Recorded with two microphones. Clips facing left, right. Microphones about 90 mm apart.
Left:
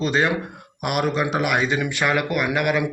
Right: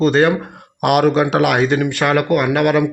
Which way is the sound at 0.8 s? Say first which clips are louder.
Right 9 dB; 70° right (ahead or behind).